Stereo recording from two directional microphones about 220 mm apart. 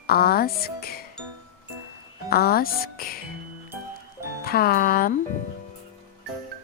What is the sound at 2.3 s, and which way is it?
Speech, 45° left (ahead or behind).